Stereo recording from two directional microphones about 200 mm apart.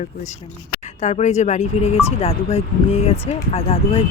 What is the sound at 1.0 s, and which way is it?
Speech, 35° left (ahead or behind).